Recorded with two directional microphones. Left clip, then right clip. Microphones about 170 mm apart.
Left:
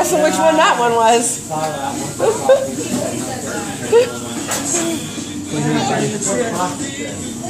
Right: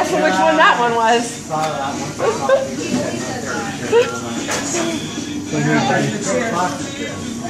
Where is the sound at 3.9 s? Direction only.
20° left (ahead or behind).